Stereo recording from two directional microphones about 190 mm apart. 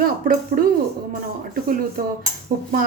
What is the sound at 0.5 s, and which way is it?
Speech, 50° right (ahead or behind).